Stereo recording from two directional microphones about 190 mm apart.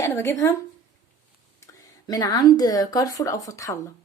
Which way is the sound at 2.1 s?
20° left (ahead or behind).